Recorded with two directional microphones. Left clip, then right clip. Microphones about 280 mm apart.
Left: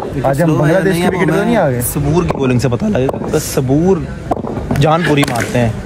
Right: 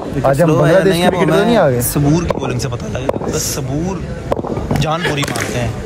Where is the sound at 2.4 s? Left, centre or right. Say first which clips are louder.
Left 6 dB; left.